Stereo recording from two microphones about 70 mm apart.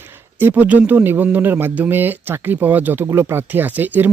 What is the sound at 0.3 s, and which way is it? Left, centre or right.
Speech, right.